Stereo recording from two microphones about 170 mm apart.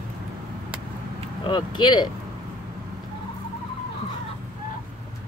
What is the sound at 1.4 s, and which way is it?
Speech, 25° left (ahead or behind).